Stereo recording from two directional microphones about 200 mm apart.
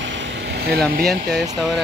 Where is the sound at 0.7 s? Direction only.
50° right (ahead or behind).